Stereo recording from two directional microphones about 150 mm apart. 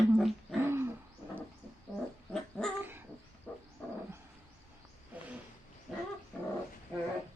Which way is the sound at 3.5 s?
5° left (ahead or behind).